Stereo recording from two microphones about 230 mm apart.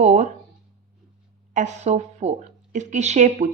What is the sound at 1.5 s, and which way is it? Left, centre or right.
Speech, right.